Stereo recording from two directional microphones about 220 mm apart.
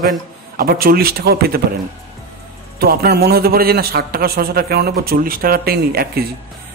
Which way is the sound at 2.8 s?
45° right (ahead or behind).